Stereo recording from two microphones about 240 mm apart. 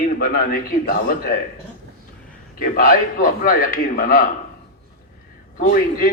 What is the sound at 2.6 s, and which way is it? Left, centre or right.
A man's voice, left.